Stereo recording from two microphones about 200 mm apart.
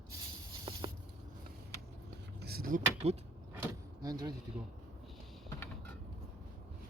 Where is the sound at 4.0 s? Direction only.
20° right (ahead or behind).